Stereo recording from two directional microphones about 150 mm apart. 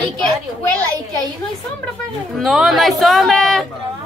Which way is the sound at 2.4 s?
Centre (ahead or behind).